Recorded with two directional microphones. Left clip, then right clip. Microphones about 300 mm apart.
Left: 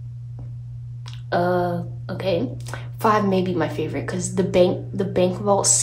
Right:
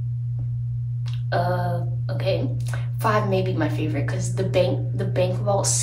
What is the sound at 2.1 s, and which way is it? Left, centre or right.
A woman's voice, left.